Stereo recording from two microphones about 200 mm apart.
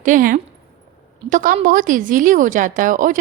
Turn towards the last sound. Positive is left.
turn(degrees=-40)  # may be behind; listen again after turning